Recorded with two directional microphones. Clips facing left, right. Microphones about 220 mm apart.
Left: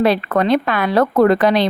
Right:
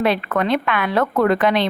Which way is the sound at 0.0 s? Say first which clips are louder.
Left 4 dB; 35° left (ahead or behind).